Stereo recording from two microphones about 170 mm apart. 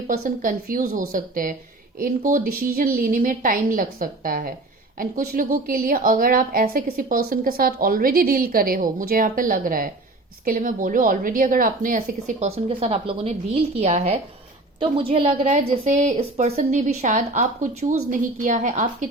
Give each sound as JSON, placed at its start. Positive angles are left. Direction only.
{"t": 0.1, "sound": "a woman's voice", "side_deg": -55}